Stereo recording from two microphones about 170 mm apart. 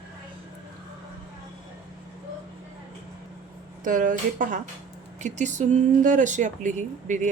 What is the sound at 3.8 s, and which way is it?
Speech, 50° right (ahead or behind).